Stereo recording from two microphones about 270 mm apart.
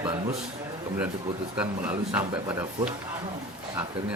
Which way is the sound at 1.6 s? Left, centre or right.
Centre.